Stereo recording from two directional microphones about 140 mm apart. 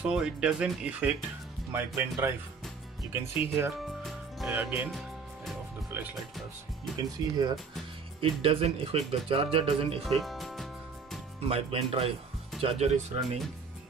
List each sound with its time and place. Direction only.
0.0 s speech: 5° right (ahead or behind)
4.0 s music: centre (ahead or behind)
4.6 s speech: 10° right (ahead or behind)
4.9 s music: centre (ahead or behind)
5.9 s music: 15° right (ahead or behind)
7.0 s speech: 30° right (ahead or behind)
8.2 s speech: 40° right (ahead or behind)
10.0 s music: centre (ahead or behind)
11.4 s speech: 45° right (ahead or behind)